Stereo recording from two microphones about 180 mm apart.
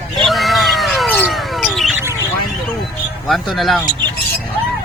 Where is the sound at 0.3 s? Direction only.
Centre (ahead or behind).